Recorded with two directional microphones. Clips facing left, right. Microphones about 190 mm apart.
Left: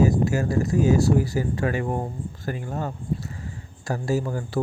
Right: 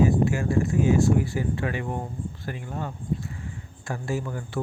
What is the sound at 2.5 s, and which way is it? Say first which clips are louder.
Speech: left 6 dB; 40° left (ahead or behind).